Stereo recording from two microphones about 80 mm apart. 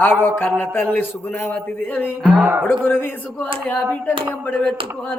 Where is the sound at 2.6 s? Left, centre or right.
Left.